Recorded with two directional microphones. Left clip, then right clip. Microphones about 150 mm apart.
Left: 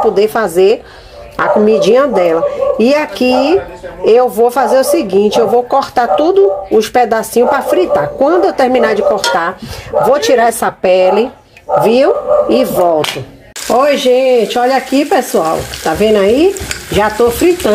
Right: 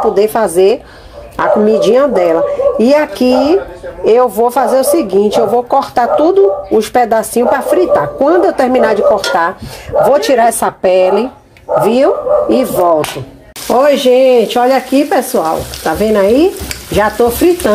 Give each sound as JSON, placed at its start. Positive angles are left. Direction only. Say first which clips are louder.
{"t": 0.1, "sound": "speech", "louder": "right 1 dB", "side_deg": 0}
{"t": 15.0, "sound": "speech", "louder": "even", "side_deg": 10}